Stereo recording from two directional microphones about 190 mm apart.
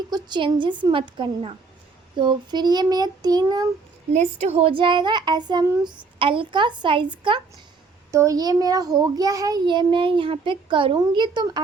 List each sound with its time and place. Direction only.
0.1 s a child's voice: 25° right (ahead or behind)
4.1 s a child's voice: 35° right (ahead or behind)